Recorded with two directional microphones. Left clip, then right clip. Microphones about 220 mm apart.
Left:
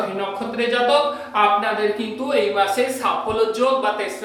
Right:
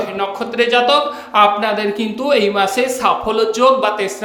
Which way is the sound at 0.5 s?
45° right (ahead or behind).